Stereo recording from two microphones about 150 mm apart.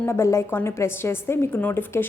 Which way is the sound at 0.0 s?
20° left (ahead or behind).